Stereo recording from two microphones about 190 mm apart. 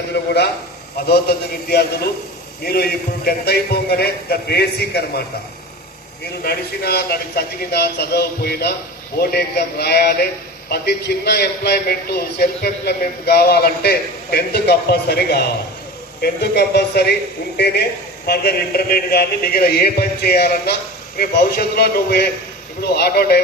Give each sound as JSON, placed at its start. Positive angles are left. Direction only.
{"t": 1.0, "sound": "a man's voice", "side_deg": 55}
{"t": 6.4, "sound": "a man's voice", "side_deg": 55}
{"t": 18.3, "sound": "a man's voice", "side_deg": 55}